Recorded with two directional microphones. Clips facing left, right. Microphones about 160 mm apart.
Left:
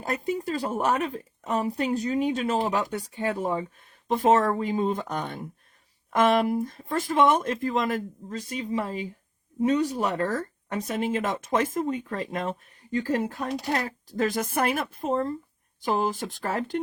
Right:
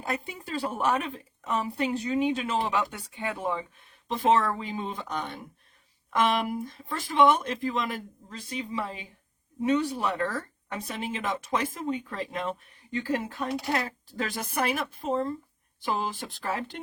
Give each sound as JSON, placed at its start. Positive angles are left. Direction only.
{"t": 0.0, "sound": "a woman's voice", "side_deg": 40}
{"t": 4.1, "sound": "a woman's voice", "side_deg": 50}